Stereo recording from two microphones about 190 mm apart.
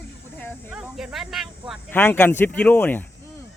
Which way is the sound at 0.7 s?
5° right (ahead or behind).